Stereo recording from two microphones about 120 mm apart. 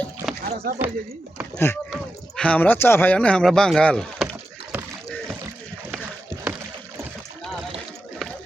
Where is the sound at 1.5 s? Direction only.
15° left (ahead or behind).